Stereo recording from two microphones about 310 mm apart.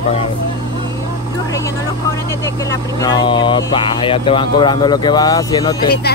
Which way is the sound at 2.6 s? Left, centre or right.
Centre.